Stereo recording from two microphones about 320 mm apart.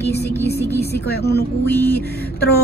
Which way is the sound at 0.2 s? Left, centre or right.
Centre.